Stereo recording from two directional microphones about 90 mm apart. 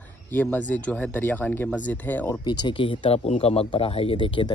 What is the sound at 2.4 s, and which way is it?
Speech, 55° left (ahead or behind).